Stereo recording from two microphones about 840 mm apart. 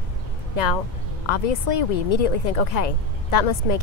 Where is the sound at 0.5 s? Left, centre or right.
Left.